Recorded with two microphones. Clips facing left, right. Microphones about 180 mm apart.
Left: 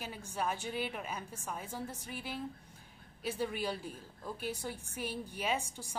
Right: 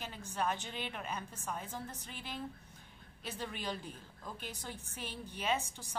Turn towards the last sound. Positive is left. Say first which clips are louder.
# even
turn(degrees=10)  # may be behind; listen again after turning